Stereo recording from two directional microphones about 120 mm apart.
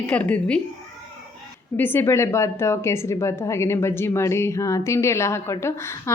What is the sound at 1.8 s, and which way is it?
A woman's voice, 20° left (ahead or behind).